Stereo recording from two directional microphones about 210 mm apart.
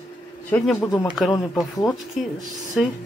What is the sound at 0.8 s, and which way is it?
Speech, 15° left (ahead or behind).